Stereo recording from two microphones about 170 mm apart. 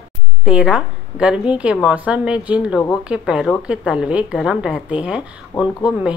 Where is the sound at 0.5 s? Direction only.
5° right (ahead or behind).